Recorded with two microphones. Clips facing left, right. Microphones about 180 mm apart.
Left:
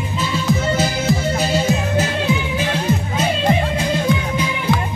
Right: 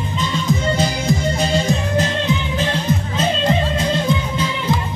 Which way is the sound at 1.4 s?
5° left (ahead or behind).